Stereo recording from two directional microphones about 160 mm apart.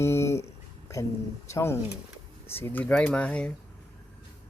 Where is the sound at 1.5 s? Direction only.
15° left (ahead or behind).